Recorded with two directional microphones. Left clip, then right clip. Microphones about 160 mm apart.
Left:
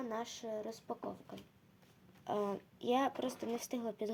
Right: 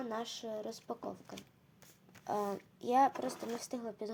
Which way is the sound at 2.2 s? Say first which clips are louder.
Right 1 dB; 10° left (ahead or behind).